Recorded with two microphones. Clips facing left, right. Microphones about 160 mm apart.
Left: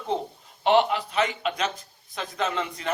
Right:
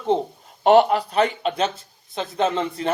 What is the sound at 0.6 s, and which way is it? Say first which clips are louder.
Speech: right 6 dB; 45° right (ahead or behind).